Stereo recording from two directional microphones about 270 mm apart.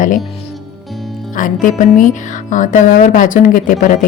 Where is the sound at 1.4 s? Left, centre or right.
Left.